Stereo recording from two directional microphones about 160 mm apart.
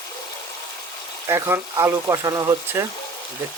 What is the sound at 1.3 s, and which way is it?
Speech, 15° right (ahead or behind).